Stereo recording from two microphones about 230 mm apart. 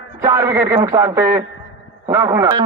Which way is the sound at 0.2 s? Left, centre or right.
Centre.